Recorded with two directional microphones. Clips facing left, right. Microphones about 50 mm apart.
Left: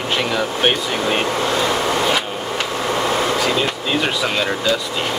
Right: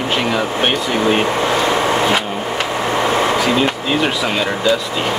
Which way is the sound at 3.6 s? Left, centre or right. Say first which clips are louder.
Right 3 dB; centre.